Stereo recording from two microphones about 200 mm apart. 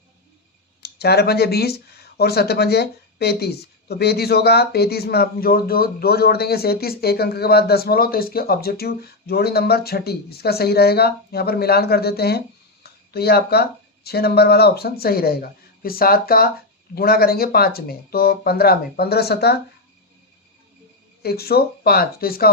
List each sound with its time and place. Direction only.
0.8 s speech: 55° left (ahead or behind)
21.2 s speech: 50° left (ahead or behind)